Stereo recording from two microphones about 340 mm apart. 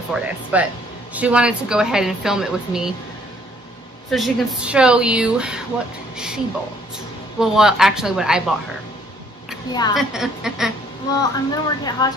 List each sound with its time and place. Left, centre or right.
0.1 s a woman's voice: centre
4.1 s a woman's voice: centre
9.9 s a woman's voice: centre
11.1 s speech: centre